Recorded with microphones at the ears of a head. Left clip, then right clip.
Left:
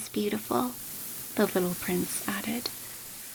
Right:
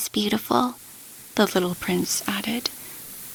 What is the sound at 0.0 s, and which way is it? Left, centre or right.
Speech, right.